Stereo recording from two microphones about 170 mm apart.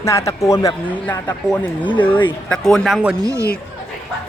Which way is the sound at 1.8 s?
30° left (ahead or behind).